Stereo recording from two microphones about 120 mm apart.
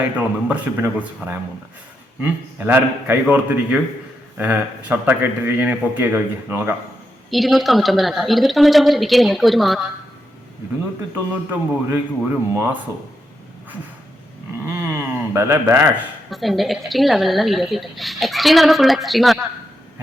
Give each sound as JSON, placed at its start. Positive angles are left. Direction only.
{"t": 0.0, "sound": "a man's voice", "side_deg": -10}
{"t": 7.3, "sound": "a woman's voice", "side_deg": 0}
{"t": 11.9, "sound": "speech", "side_deg": -20}
{"t": 14.7, "sound": "speech", "side_deg": -20}
{"t": 16.3, "sound": "a woman's voice", "side_deg": 0}